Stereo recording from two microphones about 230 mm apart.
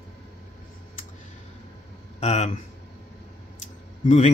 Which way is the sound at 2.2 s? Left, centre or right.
Left.